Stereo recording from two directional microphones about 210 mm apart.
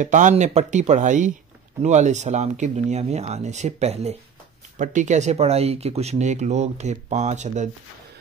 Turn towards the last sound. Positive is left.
turn(degrees=-35)  # may be behind; listen again after turning